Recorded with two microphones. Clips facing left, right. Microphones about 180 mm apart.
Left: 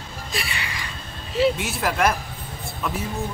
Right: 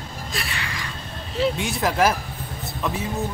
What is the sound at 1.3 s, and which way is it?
Speech, 5° left (ahead or behind).